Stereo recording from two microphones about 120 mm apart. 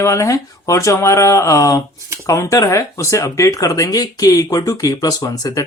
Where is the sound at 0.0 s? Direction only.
25° left (ahead or behind).